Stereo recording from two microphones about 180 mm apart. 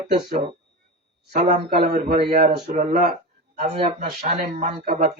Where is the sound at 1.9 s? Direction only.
55° right (ahead or behind).